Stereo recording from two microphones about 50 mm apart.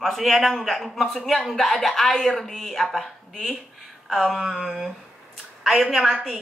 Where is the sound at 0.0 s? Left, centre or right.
Centre.